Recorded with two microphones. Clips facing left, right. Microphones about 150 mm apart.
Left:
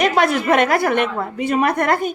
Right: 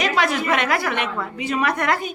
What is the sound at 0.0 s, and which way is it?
A woman's voice, 55° left (ahead or behind).